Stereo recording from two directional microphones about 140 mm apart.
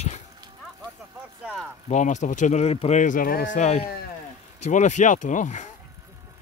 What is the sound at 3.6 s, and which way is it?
Speech, 50° left (ahead or behind).